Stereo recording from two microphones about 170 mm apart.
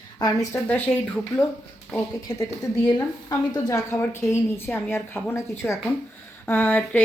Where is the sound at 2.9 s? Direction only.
25° left (ahead or behind).